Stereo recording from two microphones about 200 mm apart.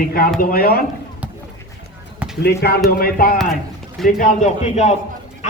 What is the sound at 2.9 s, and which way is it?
A man's voice, 50° left (ahead or behind).